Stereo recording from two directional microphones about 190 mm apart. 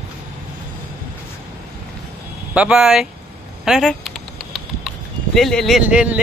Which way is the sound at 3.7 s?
Centre (ahead or behind).